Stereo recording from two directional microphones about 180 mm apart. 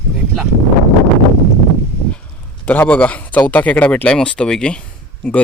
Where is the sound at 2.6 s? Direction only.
10° left (ahead or behind).